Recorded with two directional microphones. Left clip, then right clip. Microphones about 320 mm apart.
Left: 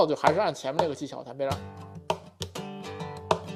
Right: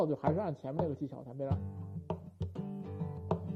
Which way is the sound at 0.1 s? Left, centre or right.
Centre.